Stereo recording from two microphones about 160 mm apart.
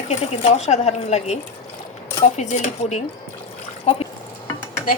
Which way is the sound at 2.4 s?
45° left (ahead or behind).